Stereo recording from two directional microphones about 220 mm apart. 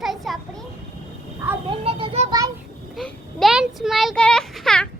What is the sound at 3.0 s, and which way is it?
A child's voice, centre (ahead or behind).